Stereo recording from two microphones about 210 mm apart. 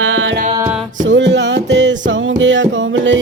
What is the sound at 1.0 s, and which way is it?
Music, 60° right (ahead or behind).